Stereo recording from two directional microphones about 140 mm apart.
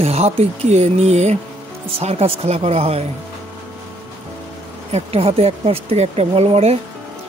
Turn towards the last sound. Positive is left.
turn(degrees=-50)  # may be behind; listen again after turning